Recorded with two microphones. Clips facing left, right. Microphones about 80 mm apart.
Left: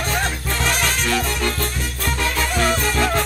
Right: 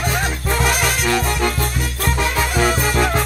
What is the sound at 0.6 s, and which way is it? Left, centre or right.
Music, centre.